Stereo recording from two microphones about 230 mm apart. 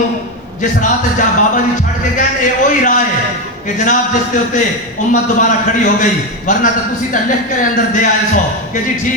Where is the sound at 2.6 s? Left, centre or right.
Left.